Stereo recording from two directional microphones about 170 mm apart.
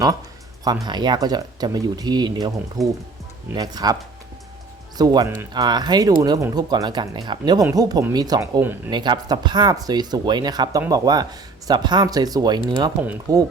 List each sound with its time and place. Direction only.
0.6 s speech: 25° right (ahead or behind)
4.9 s speech: 25° right (ahead or behind)
13.0 s speech: 10° right (ahead or behind)